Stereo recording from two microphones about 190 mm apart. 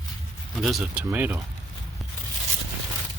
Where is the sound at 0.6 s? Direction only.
Centre (ahead or behind).